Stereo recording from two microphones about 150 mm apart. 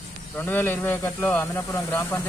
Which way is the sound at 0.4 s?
15° left (ahead or behind).